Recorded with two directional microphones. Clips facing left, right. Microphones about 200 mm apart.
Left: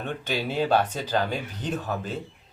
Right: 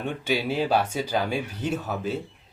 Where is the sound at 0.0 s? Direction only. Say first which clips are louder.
Right 3 dB; 10° right (ahead or behind).